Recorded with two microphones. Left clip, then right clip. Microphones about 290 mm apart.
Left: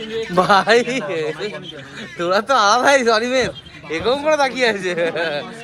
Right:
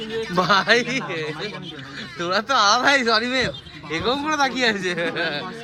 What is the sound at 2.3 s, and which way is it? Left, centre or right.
Speech, centre.